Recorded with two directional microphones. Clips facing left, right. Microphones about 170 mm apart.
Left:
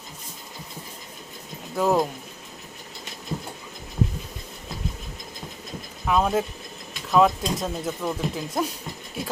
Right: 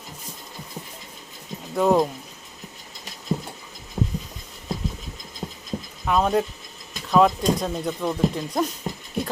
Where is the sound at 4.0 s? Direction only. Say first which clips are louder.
Even; 40° right (ahead or behind).